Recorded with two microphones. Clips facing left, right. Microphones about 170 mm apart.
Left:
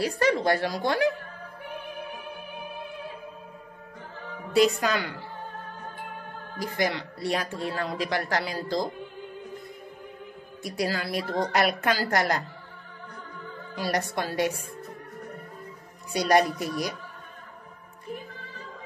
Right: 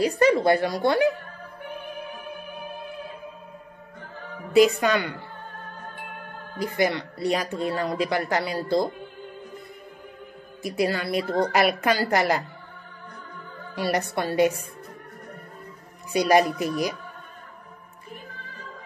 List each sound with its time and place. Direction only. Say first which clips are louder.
0.0 s speech: right 5 dB; centre (ahead or behind)
4.5 s speech: right 4 dB; centre (ahead or behind)
6.8 s speech: right 4 dB; centre (ahead or behind)
10.6 s speech: right 4 dB; centre (ahead or behind)
13.7 s speech: right 3 dB; 5° right (ahead or behind)
16.1 s speech: right 3 dB; 5° right (ahead or behind)